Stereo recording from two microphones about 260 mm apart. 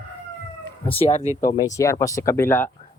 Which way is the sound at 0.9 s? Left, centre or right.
Left.